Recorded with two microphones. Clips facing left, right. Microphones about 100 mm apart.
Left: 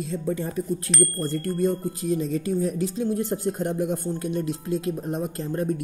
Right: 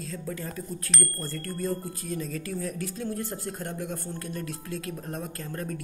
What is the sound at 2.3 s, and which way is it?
Speech, 20° left (ahead or behind).